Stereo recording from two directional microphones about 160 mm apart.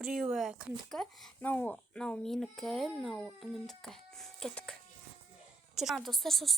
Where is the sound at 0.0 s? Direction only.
Centre (ahead or behind).